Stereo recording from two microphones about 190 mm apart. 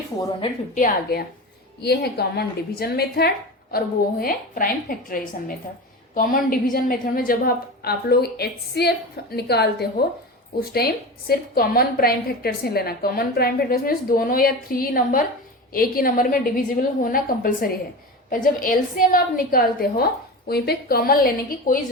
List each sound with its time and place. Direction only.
0.7 s a woman's voice: 45° left (ahead or behind)
1.8 s a woman's voice: 60° left (ahead or behind)